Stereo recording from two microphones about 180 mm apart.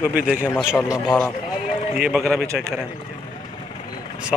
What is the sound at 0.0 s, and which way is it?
Speech, 5° right (ahead or behind).